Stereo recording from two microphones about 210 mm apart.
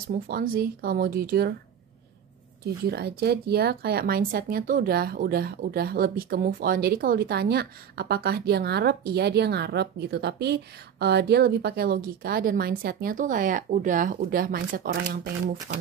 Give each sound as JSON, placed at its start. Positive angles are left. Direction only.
{"t": 0.3, "sound": "speech", "side_deg": -45}
{"t": 2.6, "sound": "speech", "side_deg": -50}